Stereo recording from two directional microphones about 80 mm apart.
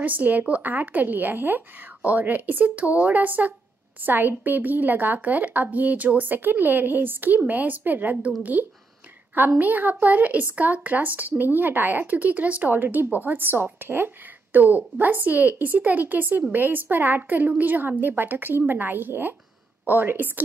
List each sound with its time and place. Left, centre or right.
0.0 s a woman's voice: centre